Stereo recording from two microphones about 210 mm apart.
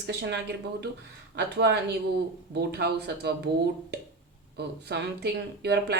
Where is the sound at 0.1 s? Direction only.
55° right (ahead or behind).